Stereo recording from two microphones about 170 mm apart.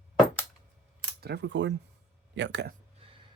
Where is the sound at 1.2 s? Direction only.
80° right.